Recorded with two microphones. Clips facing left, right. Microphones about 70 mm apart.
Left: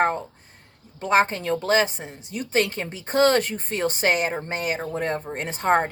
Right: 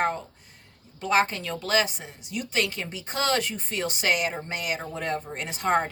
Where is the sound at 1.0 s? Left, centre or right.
Left.